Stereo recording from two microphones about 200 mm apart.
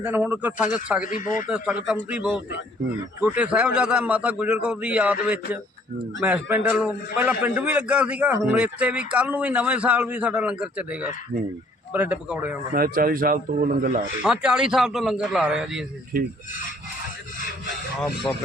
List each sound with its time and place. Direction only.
0.0 s a man's voice: 10° right (ahead or behind)
1.0 s speech: 40° left (ahead or behind)
1.5 s a man's voice: 5° right (ahead or behind)
12.7 s a man's voice: 45° right (ahead or behind)
14.2 s a man's voice: 5° right (ahead or behind)